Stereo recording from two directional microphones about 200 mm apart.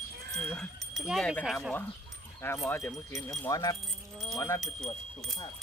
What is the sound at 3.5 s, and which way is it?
Speech, 20° left (ahead or behind).